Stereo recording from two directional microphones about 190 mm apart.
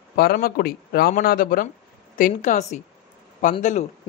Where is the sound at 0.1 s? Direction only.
50° left (ahead or behind).